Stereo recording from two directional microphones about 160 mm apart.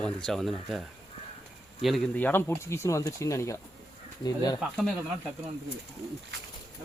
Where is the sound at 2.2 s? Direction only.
10° left (ahead or behind).